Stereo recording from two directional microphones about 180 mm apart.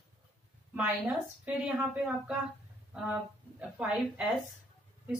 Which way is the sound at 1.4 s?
5° right (ahead or behind).